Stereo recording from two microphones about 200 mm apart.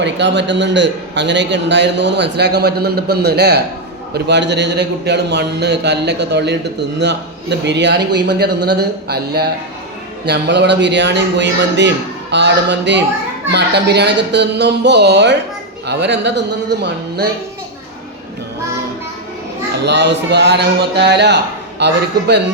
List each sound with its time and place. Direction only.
0.0 s a man's voice: 60° right (ahead or behind)
19.8 s a man's voice: 60° right (ahead or behind)